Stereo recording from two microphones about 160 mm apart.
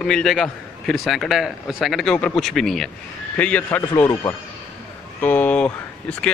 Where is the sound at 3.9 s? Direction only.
20° left (ahead or behind); by 6.3 s 5° left (ahead or behind).